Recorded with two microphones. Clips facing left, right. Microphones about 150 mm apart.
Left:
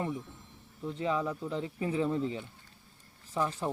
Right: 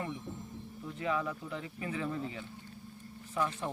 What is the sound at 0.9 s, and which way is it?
Speech, 25° left (ahead or behind).